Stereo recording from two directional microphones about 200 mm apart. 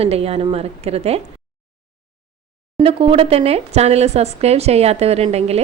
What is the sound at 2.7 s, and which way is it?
A woman's voice, 30° right (ahead or behind).